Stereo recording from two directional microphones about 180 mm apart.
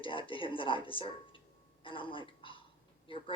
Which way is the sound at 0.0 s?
30° left (ahead or behind).